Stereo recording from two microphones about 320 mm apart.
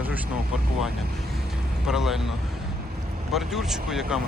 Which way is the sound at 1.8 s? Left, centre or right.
Centre.